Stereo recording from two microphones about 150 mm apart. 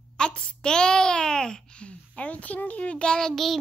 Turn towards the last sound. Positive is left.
turn(degrees=0)  # may be behind; listen again after turning